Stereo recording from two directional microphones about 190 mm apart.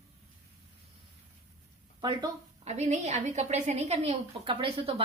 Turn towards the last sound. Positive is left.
turn(degrees=-30)  # may be behind; listen again after turning